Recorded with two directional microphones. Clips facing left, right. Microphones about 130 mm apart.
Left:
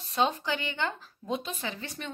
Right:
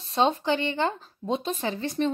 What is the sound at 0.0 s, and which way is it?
Speech, 30° right (ahead or behind).